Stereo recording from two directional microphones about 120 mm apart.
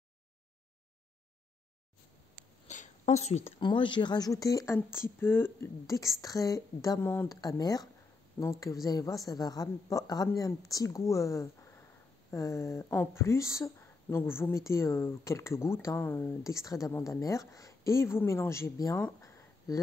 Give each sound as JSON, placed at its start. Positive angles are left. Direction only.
{"t": 2.7, "sound": "a sound", "side_deg": 80}
{"t": 3.5, "sound": "speech", "side_deg": 45}
{"t": 7.3, "sound": "speech", "side_deg": 30}